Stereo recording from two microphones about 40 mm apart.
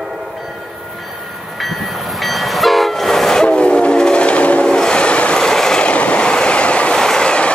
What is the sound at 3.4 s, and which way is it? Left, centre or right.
Train, left.